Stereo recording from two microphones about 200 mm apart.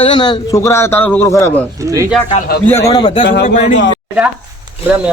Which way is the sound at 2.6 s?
15° left (ahead or behind).